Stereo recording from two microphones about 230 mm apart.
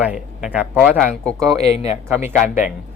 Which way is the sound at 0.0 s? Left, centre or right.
Centre.